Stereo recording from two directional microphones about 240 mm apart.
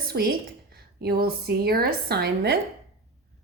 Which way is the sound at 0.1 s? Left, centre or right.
Right.